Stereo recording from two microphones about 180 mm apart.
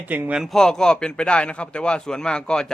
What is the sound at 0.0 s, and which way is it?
A man's voice, 10° right (ahead or behind).